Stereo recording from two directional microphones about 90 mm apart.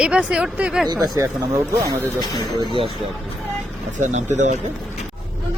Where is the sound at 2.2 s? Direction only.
50° left (ahead or behind).